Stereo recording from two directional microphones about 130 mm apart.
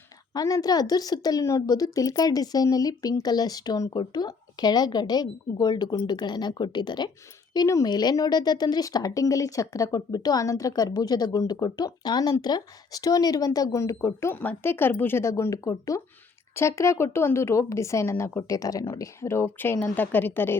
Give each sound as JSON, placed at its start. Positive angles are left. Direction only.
{"t": 0.3, "sound": "speech", "side_deg": 30}